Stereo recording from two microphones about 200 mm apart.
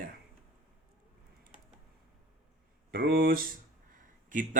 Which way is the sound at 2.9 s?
50° right (ahead or behind).